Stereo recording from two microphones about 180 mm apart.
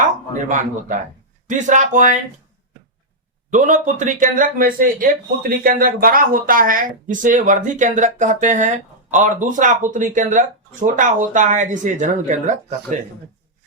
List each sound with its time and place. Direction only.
0.4 s speech: 45° right (ahead or behind)
3.5 s speech: 45° right (ahead or behind)